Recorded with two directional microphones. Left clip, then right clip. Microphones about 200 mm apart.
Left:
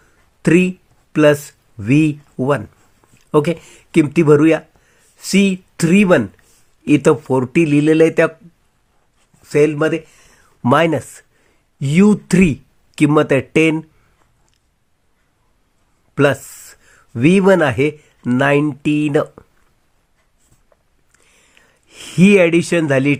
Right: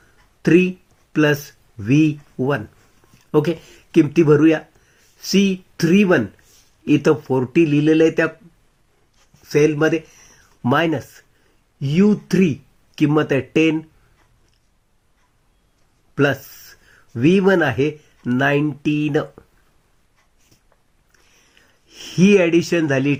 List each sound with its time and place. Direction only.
0.4 s speech: 30° left (ahead or behind)
9.4 s speech: 25° left (ahead or behind)
16.1 s speech: 35° left (ahead or behind)
21.5 s speech: 30° left (ahead or behind)